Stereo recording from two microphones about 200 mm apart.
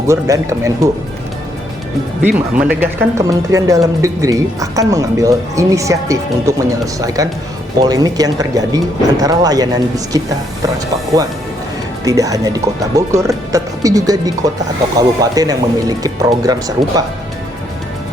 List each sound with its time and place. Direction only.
0.1 s speech: 15° right (ahead or behind)
2.2 s speech: 10° right (ahead or behind)
12.0 s speech: 15° right (ahead or behind)